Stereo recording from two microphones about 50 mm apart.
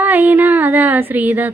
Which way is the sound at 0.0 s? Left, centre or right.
Right.